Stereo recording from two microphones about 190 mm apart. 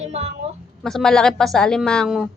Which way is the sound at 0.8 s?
Centre (ahead or behind).